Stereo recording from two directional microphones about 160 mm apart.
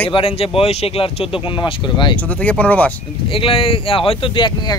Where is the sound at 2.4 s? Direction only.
10° left (ahead or behind).